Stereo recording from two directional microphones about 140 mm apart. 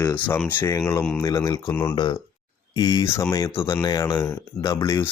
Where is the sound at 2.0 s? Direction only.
35° left (ahead or behind).